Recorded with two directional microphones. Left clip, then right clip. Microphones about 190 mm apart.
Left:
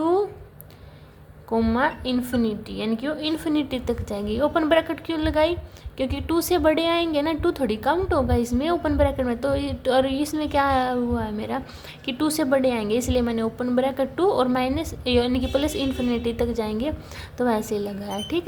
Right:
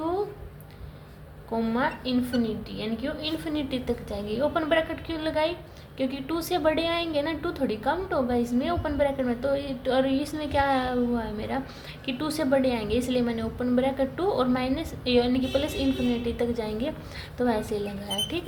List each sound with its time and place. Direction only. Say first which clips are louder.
1.5 s a woman's voice: left 5 dB; 40° left (ahead or behind)